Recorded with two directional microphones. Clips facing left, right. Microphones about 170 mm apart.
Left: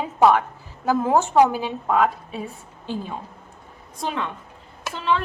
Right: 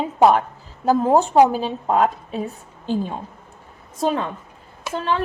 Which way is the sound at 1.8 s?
35° right (ahead or behind).